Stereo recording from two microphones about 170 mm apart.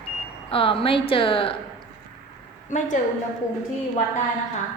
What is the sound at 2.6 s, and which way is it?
Speech, 45° left (ahead or behind).